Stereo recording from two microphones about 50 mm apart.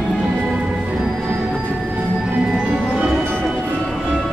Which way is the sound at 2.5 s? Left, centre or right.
Centre.